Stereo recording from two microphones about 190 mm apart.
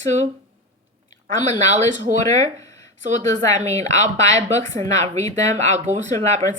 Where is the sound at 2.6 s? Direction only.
20° left (ahead or behind).